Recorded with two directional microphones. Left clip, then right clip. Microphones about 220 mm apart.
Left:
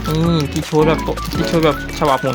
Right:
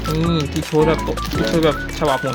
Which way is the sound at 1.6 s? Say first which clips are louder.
Left 2 dB; 10° left (ahead or behind).